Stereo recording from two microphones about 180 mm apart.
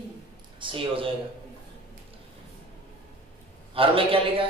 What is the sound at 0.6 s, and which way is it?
Speech, 30° right (ahead or behind).